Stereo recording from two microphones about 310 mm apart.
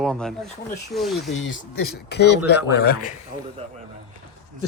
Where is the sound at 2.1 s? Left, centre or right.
Left.